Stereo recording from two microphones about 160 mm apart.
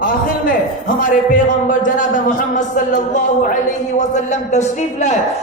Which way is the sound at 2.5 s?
50° left (ahead or behind).